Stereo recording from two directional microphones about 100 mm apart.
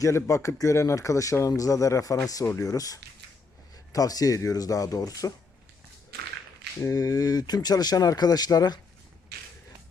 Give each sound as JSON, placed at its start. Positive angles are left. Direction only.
{"t": 0.0, "sound": "a man's voice", "side_deg": 30}
{"t": 6.8, "sound": "a man's voice", "side_deg": 35}